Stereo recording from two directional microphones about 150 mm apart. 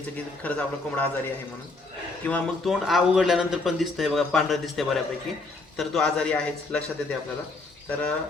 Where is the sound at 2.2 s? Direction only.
5° left (ahead or behind).